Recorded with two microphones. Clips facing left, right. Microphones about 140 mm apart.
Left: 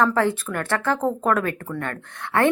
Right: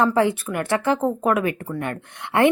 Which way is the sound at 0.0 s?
15° right (ahead or behind).